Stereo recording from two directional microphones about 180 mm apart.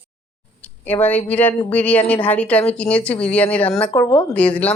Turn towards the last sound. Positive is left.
turn(degrees=10)  # may be behind; listen again after turning